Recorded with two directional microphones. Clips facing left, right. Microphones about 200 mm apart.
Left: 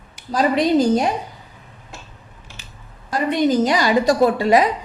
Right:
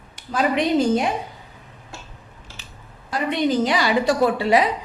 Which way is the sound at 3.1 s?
45° left (ahead or behind).